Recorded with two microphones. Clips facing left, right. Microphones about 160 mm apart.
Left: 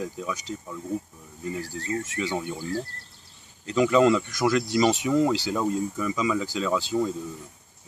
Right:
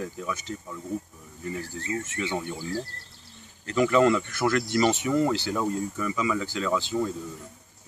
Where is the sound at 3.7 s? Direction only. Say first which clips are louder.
Left 1 dB; 15° left (ahead or behind).